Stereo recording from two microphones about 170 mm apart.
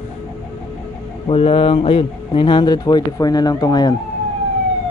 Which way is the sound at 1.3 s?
35° left (ahead or behind).